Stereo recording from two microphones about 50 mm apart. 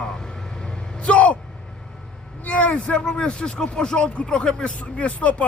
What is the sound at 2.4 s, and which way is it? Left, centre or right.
Speech, left.